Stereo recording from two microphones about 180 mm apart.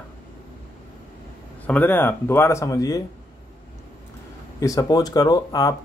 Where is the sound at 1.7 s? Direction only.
10° left (ahead or behind).